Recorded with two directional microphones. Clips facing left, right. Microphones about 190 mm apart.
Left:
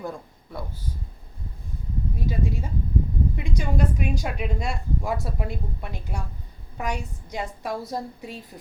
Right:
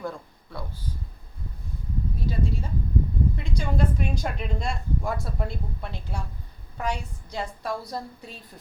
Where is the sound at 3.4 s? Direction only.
10° left (ahead or behind).